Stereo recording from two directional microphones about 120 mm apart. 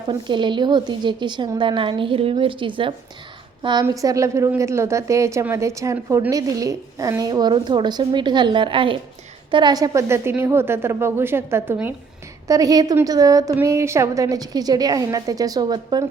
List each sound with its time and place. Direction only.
0.1 s a woman's voice: 40° right (ahead or behind)
3.8 s a woman's voice: 30° right (ahead or behind)
12.5 s a woman's voice: 30° right (ahead or behind)